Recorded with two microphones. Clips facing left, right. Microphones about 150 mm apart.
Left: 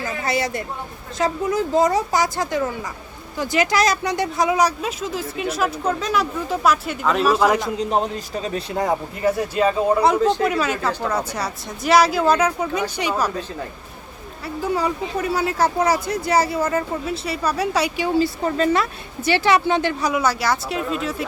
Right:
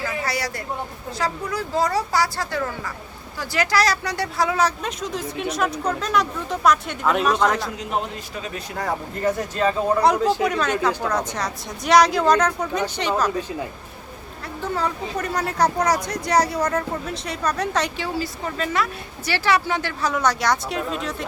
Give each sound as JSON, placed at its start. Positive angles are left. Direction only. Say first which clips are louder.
{"t": 0.0, "sound": "a sound", "louder": "left 3 dB", "side_deg": 20}
{"t": 1.2, "sound": "speech", "louder": "left 6 dB", "side_deg": 20}
{"t": 7.8, "sound": "a man's voice", "louder": "left 5 dB", "side_deg": 35}
{"t": 9.2, "sound": "speech", "louder": "left 2 dB", "side_deg": 5}
{"t": 14.4, "sound": "speech", "louder": "left 3 dB", "side_deg": 10}
{"t": 18.2, "sound": "speech", "louder": "left 10 dB", "side_deg": 35}